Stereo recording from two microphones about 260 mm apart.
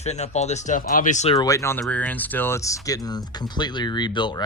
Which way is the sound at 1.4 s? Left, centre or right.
Centre.